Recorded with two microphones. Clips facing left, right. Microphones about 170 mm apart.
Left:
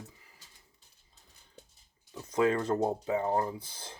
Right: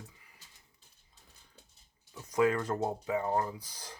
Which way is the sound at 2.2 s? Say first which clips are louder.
Left 1 dB; 25° left (ahead or behind).